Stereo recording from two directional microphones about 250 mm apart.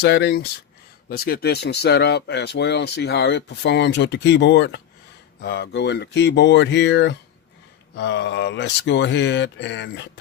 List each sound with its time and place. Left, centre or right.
0.0 s speech: left